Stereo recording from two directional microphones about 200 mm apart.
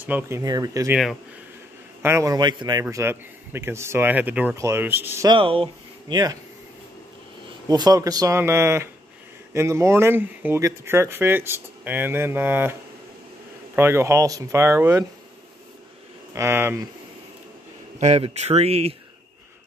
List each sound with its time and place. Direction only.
0.0 s a man's voice: 10° right (ahead or behind)
2.0 s a man's voice: 15° right (ahead or behind)
5.3 s speech: 25° right (ahead or behind)
7.6 s a man's voice: 20° right (ahead or behind)
13.7 s a man's voice: 10° right (ahead or behind)
16.3 s a man's voice: 10° right (ahead or behind)
17.9 s speech: 35° right (ahead or behind)